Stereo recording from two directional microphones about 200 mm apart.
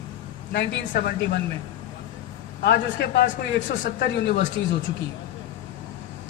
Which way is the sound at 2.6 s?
55° left (ahead or behind).